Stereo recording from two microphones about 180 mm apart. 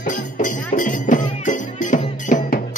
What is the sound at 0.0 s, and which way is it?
Music, 45° left (ahead or behind).